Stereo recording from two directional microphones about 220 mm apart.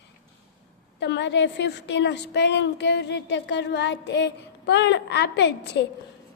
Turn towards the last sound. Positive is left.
turn(degrees=50)  # may be behind; listen again after turning